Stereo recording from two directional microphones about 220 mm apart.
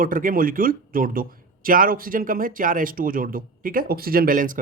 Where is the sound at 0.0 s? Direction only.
40° right (ahead or behind).